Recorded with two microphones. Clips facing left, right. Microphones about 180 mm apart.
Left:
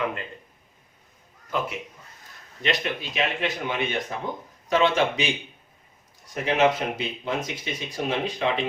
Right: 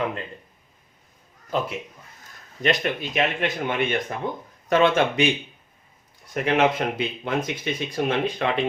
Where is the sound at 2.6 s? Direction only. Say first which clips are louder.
Right 4 dB; 50° right (ahead or behind).